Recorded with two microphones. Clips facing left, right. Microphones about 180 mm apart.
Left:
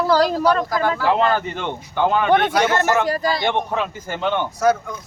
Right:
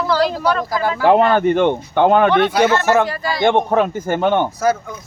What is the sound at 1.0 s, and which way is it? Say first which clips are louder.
Speech: right 10 dB; 55° right (ahead or behind).